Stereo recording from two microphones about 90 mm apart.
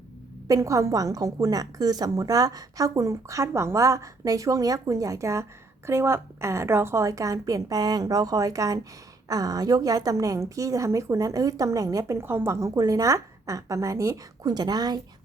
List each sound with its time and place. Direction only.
0.4 s a woman's voice: 35° right (ahead or behind)
14.4 s a woman's voice: 50° right (ahead or behind)